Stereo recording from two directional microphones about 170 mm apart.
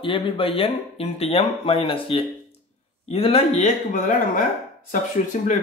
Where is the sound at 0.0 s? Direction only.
30° left (ahead or behind).